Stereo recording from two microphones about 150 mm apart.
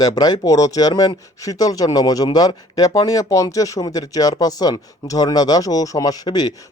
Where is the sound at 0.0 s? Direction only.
25° left (ahead or behind).